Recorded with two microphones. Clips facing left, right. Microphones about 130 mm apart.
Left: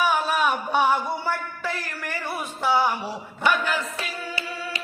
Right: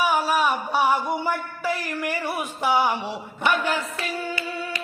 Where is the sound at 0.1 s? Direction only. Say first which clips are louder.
Right 1 dB; 5° right (ahead or behind); by 3.5 s 20° right (ahead or behind).